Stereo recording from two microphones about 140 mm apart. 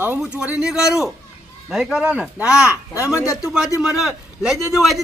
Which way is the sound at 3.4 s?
5° right (ahead or behind).